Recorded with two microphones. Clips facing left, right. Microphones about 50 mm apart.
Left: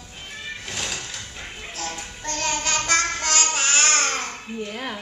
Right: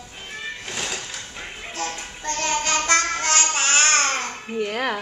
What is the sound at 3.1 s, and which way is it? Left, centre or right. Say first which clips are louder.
Babbling: right 2 dB; centre.